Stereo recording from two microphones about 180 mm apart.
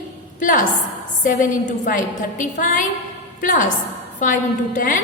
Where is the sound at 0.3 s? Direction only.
45° left (ahead or behind).